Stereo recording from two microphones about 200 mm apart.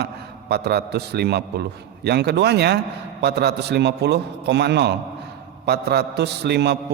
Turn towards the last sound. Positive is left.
turn(degrees=-55)  # may be behind; listen again after turning